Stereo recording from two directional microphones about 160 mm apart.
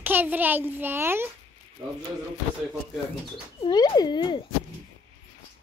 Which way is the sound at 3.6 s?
25° left (ahead or behind).